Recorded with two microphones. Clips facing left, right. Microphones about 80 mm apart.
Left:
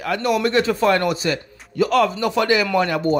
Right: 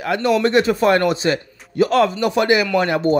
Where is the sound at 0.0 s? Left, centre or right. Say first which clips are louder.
Right 3 dB; right.